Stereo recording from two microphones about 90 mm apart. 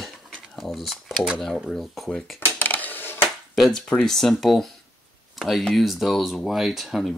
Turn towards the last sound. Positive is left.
turn(degrees=0)  # may be behind; listen again after turning